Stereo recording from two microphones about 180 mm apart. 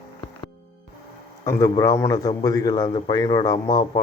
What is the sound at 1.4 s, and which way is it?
Speech, 20° left (ahead or behind).